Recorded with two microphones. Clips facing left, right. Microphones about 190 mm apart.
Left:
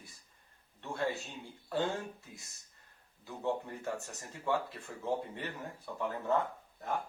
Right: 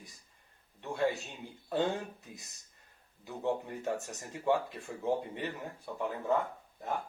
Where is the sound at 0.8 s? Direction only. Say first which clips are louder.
Right 4 dB; 15° right (ahead or behind).